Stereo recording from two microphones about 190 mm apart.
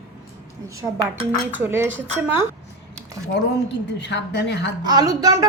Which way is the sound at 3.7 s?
65° left (ahead or behind).